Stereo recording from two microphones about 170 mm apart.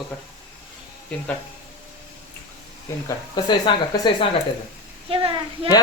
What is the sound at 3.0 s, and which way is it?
Speech, 25° left (ahead or behind).